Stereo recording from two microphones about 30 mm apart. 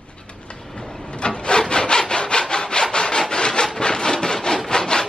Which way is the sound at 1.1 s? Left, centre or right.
Left.